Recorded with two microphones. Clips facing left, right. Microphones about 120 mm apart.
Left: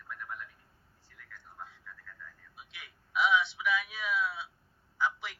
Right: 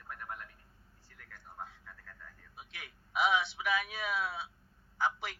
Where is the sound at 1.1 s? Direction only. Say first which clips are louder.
Even; 45° right (ahead or behind).